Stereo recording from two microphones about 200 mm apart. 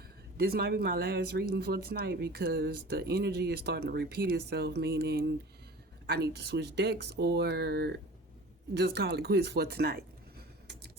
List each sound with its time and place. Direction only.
0.3 s speech: 50° right (ahead or behind)